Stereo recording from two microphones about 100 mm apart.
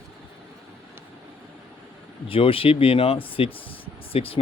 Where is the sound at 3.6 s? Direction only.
70° left (ahead or behind).